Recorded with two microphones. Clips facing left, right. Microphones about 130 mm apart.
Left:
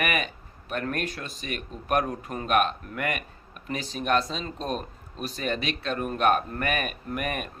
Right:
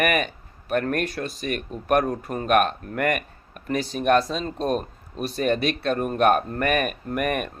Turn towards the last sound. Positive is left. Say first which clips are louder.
# right 6 dB
turn(degrees=-50)  # may be behind; listen again after turning